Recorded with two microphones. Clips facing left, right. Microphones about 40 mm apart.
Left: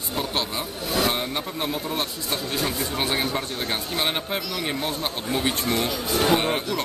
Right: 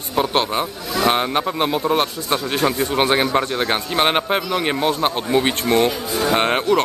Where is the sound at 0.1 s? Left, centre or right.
Right.